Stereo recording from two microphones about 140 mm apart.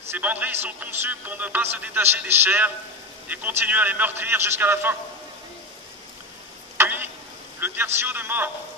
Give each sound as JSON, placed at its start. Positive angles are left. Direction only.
{"t": 0.1, "sound": "a man's voice", "side_deg": -10}
{"t": 6.8, "sound": "stir", "side_deg": -15}
{"t": 7.6, "sound": "a man's voice", "side_deg": -15}